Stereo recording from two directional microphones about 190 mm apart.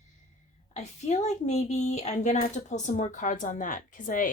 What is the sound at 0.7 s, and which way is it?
Speech, 40° left (ahead or behind).